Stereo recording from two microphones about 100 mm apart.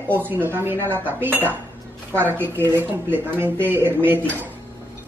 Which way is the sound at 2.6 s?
20° right (ahead or behind).